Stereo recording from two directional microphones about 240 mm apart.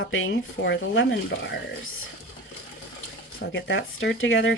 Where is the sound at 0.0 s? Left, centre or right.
Left.